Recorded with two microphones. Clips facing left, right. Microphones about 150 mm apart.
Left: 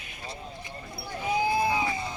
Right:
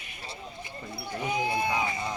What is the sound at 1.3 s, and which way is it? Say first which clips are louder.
Crowd: left 3 dB; 30° left (ahead or behind).